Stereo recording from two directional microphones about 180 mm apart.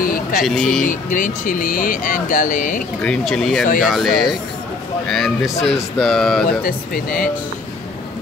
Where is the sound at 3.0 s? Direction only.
5° left (ahead or behind).